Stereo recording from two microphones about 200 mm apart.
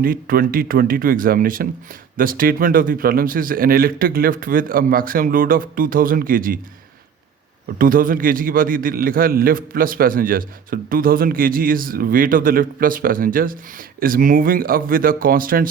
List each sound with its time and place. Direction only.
0.0 s a man's voice: 45° right (ahead or behind)
7.8 s a man's voice: 45° right (ahead or behind)